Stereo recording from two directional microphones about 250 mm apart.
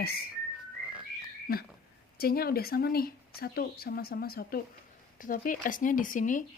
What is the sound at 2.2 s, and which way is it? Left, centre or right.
Speech, left.